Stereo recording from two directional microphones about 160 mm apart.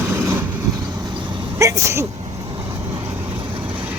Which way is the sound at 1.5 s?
15° right (ahead or behind).